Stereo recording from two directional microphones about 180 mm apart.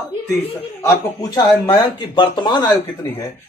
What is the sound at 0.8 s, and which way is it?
Speech, 20° left (ahead or behind).